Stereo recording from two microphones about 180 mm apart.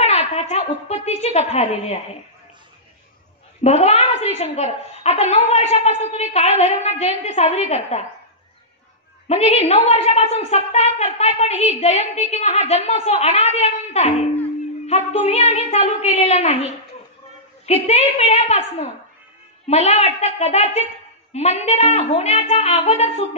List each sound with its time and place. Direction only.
0.0 s a woman's voice: 40° left (ahead or behind)
3.6 s a woman's voice: 35° left (ahead or behind)
9.3 s a woman's voice: 35° left (ahead or behind)
17.8 s a woman's voice: 35° left (ahead or behind)